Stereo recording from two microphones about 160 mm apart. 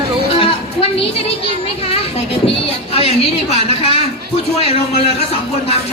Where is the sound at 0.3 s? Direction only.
35° left (ahead or behind).